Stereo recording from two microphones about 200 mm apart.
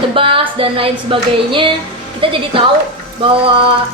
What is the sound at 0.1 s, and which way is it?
A woman's voice, 25° right (ahead or behind).